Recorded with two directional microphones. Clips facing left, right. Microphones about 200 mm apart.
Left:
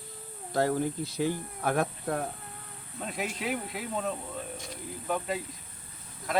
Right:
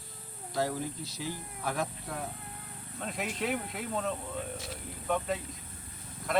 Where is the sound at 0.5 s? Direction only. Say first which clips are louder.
Left 5 dB; 55° left (ahead or behind).